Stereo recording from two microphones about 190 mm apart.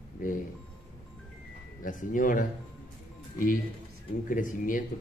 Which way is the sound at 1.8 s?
45° left (ahead or behind).